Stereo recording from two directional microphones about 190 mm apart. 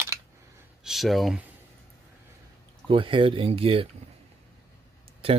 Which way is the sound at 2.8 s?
25° right (ahead or behind).